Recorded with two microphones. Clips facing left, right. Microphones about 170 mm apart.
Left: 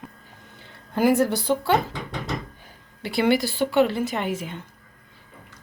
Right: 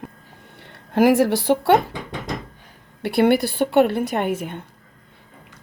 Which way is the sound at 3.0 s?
60° right (ahead or behind).